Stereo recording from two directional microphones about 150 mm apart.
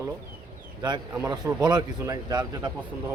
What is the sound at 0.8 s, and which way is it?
A man's voice, 30° right (ahead or behind).